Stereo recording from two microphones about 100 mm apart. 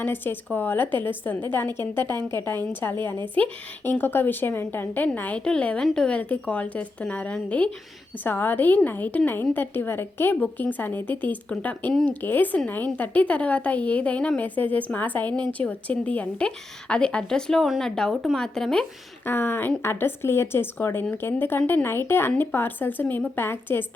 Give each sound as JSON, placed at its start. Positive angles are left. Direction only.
{"t": 0.0, "sound": "a woman's voice", "side_deg": 20}
{"t": 19.2, "sound": "a woman's voice", "side_deg": 20}